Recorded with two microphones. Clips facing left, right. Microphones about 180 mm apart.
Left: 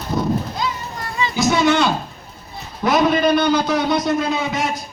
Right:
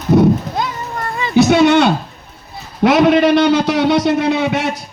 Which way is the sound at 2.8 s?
75° right (ahead or behind).